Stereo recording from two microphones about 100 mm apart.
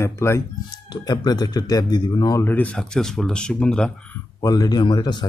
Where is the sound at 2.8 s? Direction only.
5° left (ahead or behind).